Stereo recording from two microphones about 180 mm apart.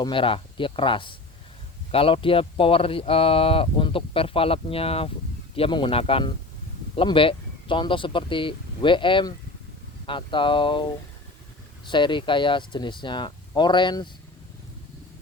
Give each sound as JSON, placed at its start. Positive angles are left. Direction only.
{"t": 0.0, "sound": "speech", "side_deg": 30}
{"t": 11.9, "sound": "speech", "side_deg": 25}